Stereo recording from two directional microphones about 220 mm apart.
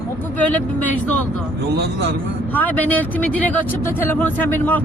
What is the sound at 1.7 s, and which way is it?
Speech, 50° right (ahead or behind).